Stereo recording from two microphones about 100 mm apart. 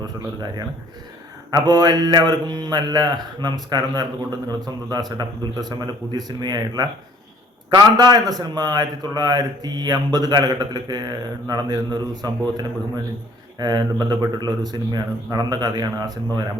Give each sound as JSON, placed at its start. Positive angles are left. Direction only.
{"t": 1.5, "sound": "a man's voice", "side_deg": -40}